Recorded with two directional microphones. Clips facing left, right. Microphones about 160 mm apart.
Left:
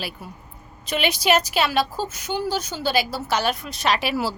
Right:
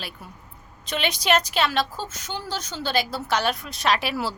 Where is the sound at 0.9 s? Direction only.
5° left (ahead or behind).